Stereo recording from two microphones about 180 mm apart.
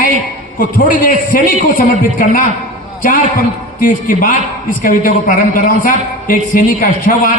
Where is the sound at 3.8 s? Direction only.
50° left (ahead or behind).